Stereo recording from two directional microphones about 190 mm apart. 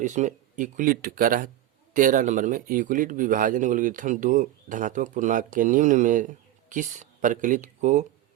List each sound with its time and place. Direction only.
0.0 s speech: 40° right (ahead or behind)